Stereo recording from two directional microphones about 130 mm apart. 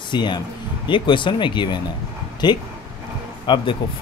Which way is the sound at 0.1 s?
35° left (ahead or behind).